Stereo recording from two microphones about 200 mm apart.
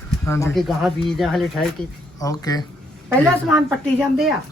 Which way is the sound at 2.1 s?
20° left (ahead or behind).